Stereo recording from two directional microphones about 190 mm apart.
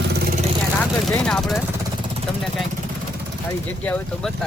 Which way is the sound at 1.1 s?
5° left (ahead or behind).